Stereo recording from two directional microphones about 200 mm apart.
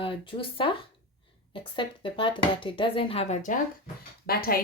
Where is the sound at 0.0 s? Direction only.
25° left (ahead or behind).